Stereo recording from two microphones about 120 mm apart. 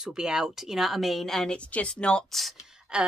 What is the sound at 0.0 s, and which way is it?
A woman's voice, 5° right (ahead or behind).